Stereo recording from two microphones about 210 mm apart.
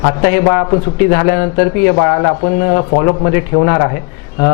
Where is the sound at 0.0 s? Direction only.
25° left (ahead or behind).